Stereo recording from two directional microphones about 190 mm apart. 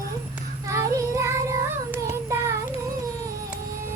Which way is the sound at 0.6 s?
15° right (ahead or behind).